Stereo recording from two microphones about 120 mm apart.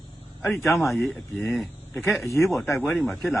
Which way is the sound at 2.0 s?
20° left (ahead or behind).